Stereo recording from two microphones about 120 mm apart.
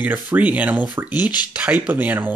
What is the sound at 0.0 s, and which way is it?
Speech, 15° right (ahead or behind).